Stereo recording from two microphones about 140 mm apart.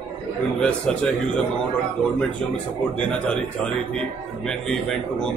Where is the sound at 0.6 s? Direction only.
10° left (ahead or behind).